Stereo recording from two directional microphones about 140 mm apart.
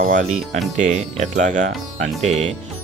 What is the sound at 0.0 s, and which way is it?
Speech, 70° right (ahead or behind).